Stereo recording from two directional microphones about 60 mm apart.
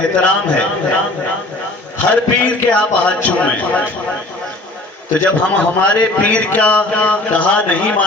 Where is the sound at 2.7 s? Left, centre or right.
Left.